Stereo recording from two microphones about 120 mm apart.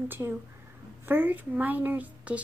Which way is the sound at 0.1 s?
15° right (ahead or behind).